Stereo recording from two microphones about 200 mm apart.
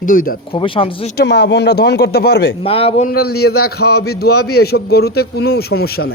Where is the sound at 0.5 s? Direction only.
25° left (ahead or behind).